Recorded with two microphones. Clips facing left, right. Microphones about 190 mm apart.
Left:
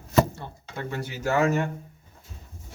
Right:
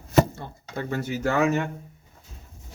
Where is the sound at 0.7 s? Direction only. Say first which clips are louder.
Right 4 dB; 45° right (ahead or behind).